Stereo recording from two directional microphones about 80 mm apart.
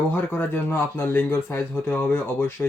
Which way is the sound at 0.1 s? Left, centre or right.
Left.